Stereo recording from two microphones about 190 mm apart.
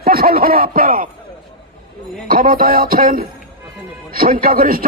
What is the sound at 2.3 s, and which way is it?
Speech, 50° right (ahead or behind).